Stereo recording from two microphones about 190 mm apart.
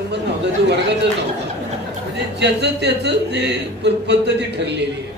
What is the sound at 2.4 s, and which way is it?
A man's voice, 60° right (ahead or behind).